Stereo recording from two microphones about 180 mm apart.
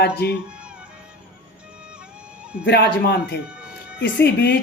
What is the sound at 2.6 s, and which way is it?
Speech, 60° left (ahead or behind).